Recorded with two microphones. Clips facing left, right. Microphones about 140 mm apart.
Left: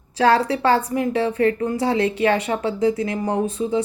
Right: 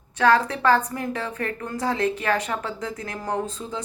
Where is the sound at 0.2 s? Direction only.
30° left (ahead or behind).